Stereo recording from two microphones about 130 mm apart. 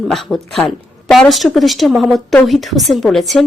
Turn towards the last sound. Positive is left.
turn(degrees=0)  # may be behind; listen again after turning